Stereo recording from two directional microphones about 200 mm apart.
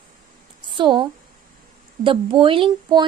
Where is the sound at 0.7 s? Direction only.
25° right (ahead or behind).